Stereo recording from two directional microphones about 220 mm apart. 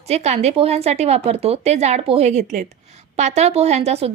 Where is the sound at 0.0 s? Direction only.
30° right (ahead or behind).